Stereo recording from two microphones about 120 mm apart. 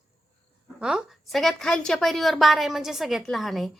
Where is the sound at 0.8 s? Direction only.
5° right (ahead or behind).